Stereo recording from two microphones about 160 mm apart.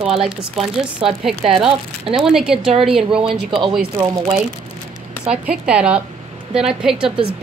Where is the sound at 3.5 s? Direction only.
30° right (ahead or behind).